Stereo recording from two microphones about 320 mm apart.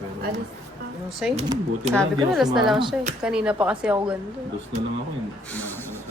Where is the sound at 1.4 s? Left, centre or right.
Centre.